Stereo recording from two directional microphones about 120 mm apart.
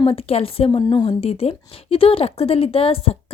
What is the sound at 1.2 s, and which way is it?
A woman's voice, 60° left (ahead or behind).